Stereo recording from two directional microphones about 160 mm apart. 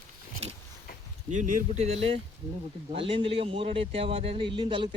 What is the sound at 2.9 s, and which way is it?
A man's voice, 35° right (ahead or behind).